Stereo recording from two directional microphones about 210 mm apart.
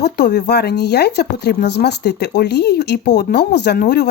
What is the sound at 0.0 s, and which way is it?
Speech, 50° left (ahead or behind).